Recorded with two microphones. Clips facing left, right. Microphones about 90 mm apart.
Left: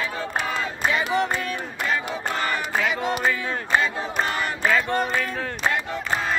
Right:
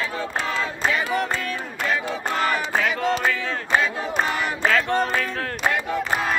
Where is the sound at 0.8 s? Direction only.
15° left (ahead or behind).